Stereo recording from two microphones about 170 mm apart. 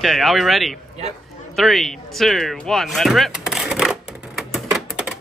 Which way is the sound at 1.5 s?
Centre (ahead or behind).